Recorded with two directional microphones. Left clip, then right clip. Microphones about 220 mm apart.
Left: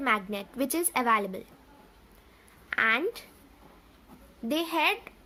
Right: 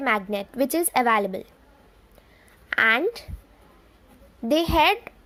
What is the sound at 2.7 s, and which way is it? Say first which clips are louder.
Speech: right 6 dB; 25° right (ahead or behind).